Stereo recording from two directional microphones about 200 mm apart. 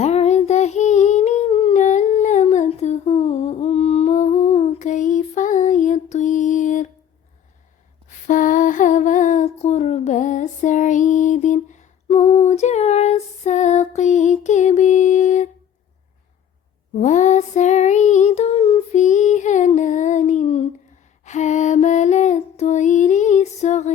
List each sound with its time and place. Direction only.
0.0 s humming: 30° left (ahead or behind)
8.3 s a sound: 40° left (ahead or behind)
16.9 s music: 40° left (ahead or behind)
21.2 s lullaby: 35° left (ahead or behind)